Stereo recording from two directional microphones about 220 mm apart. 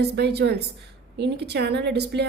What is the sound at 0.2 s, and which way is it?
A woman's voice, 50° right (ahead or behind).